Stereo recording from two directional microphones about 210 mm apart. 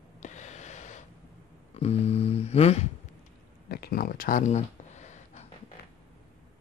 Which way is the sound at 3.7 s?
45° left (ahead or behind).